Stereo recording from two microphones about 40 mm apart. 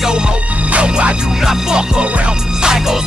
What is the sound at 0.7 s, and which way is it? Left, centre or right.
Music, right.